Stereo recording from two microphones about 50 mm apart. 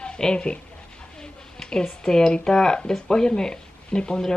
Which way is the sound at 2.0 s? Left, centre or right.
Centre.